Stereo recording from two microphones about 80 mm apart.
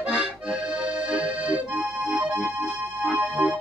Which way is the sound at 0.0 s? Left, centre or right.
Centre.